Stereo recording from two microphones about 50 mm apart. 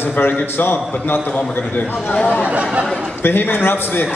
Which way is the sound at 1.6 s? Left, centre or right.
Left.